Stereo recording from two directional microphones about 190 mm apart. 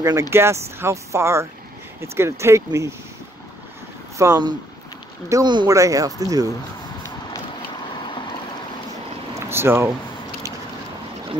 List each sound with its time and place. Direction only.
0.0 s speech: 15° right (ahead or behind)
4.2 s speech: 20° right (ahead or behind)
9.5 s speech: 10° right (ahead or behind)